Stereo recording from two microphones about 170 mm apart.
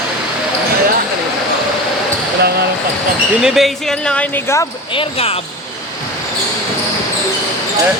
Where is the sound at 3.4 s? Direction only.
Centre (ahead or behind); by 4.6 s 15° left (ahead or behind).